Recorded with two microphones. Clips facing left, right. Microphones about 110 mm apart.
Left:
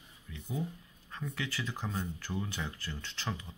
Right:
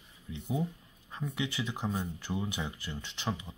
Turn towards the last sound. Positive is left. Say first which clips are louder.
# right 3 dB
turn(degrees=-15)  # may be behind; listen again after turning